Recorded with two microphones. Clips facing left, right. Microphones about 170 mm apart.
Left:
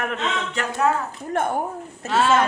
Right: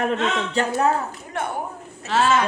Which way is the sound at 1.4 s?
50° left (ahead or behind).